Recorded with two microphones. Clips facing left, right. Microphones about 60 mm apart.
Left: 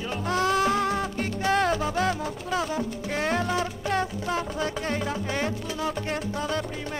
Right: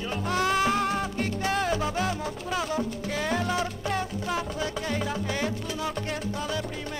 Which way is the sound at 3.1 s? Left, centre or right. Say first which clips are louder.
Left 2 dB; left.